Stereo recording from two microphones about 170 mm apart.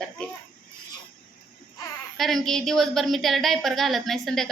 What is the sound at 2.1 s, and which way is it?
A woman's voice, centre (ahead or behind).